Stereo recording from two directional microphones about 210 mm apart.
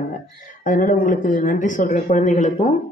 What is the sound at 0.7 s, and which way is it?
A woman's voice, 40° left (ahead or behind).